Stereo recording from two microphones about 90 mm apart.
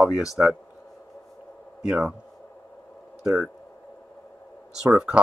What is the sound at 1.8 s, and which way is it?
Speech, 5° right (ahead or behind).